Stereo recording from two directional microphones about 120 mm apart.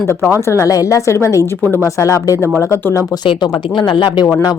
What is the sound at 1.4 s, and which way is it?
Speech, 25° right (ahead or behind).